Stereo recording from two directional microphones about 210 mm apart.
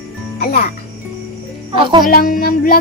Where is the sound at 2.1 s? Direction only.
45° left (ahead or behind).